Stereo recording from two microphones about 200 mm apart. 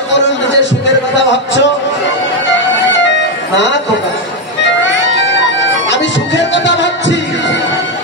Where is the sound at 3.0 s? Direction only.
60° left (ahead or behind).